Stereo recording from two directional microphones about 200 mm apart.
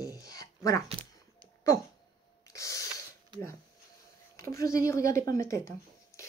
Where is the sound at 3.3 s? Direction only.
25° right (ahead or behind).